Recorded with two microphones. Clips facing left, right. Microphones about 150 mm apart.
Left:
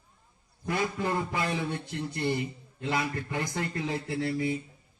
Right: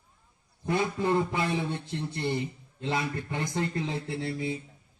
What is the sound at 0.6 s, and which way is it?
A man's voice, 25° right (ahead or behind).